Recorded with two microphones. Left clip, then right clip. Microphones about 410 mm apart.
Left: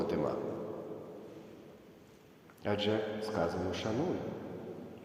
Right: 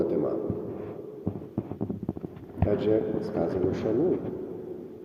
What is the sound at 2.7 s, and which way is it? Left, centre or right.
Speech, centre.